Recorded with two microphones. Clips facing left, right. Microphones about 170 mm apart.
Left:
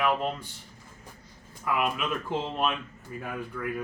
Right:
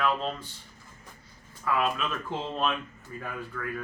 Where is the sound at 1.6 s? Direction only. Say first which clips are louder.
Even; 15° left (ahead or behind).